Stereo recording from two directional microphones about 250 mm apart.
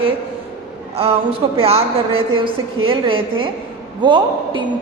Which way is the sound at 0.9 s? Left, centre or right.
Right.